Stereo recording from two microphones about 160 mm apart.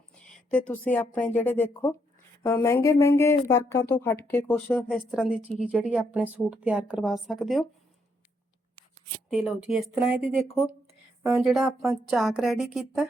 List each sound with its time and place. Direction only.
0.2 s a sound: 5° left (ahead or behind)
0.9 s speech: 10° left (ahead or behind)
4.9 s speech: 5° right (ahead or behind)
9.3 s a woman's voice: 5° right (ahead or behind)
11.3 s a woman's voice: centre (ahead or behind)